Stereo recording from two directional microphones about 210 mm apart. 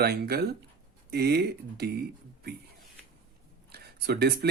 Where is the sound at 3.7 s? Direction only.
50° right (ahead or behind).